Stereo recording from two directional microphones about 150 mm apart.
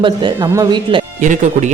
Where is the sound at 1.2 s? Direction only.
55° right (ahead or behind).